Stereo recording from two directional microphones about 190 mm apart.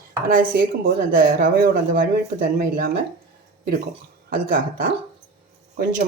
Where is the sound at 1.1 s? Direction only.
50° right (ahead or behind).